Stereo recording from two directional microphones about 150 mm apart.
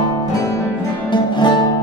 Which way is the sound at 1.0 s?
30° left (ahead or behind).